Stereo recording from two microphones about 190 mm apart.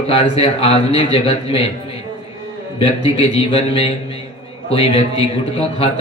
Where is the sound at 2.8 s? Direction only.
30° left (ahead or behind).